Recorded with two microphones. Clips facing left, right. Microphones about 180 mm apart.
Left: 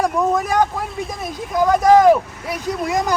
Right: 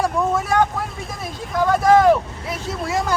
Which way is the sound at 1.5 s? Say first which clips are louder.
Left 2 dB; 15° left (ahead or behind).